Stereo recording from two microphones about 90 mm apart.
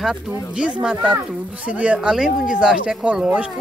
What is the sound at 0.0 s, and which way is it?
Speech, 10° right (ahead or behind).